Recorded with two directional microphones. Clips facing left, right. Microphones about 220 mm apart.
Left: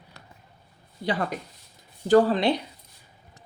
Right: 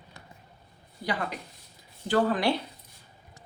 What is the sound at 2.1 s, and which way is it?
Speech, 40° left (ahead or behind).